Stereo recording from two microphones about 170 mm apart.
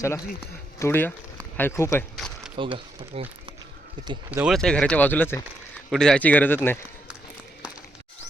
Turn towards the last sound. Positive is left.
turn(degrees=10)  # may be behind; listen again after turning